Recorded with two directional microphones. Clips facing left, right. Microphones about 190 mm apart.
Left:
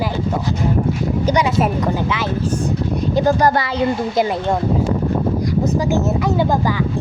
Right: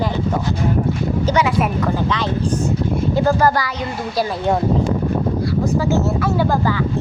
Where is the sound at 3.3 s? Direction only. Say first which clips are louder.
Left 2 dB; 20° left (ahead or behind).